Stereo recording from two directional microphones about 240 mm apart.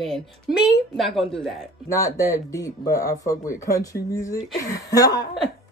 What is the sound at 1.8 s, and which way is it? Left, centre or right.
Speech, centre.